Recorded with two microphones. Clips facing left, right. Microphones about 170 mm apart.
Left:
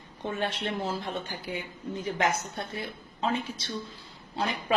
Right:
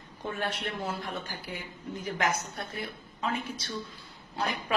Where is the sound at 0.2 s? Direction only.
25° left (ahead or behind).